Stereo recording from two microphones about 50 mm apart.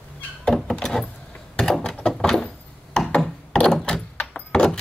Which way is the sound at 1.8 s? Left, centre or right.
Centre.